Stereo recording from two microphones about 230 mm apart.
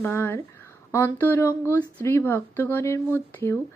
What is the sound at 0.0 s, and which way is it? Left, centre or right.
Speech, centre.